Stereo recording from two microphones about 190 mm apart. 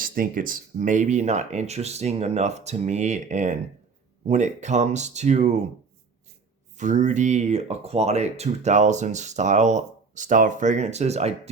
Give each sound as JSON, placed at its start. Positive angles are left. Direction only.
{"t": 0.0, "sound": "speech", "side_deg": -45}
{"t": 6.7, "sound": "speech", "side_deg": -40}